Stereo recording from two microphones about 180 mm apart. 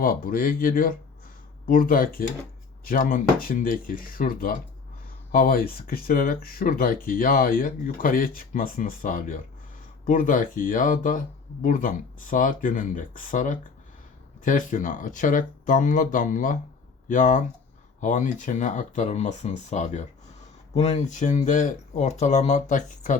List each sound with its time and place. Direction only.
0.0 s speech: 50° left (ahead or behind)